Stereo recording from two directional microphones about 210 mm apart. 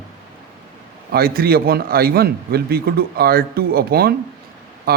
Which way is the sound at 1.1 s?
45° right (ahead or behind).